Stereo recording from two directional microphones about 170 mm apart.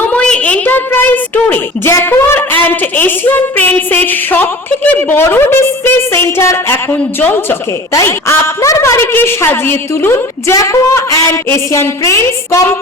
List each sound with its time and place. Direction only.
0.1 s speech: 5° left (ahead or behind)
7.9 s speech: 15° left (ahead or behind)